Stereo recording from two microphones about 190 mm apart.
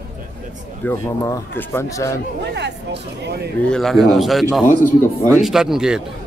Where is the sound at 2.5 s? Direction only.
65° right (ahead or behind).